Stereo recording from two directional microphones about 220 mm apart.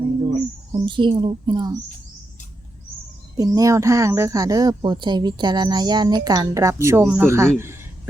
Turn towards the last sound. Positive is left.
turn(degrees=-10)  # may be behind; listen again after turning